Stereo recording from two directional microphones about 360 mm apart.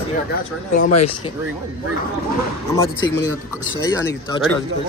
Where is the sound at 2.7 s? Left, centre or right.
Centre.